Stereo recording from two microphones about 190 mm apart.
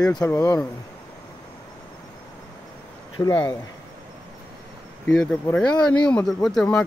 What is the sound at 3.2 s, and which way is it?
Speech, 15° left (ahead or behind).